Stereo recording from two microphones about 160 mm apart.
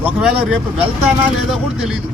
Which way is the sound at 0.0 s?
5° right (ahead or behind).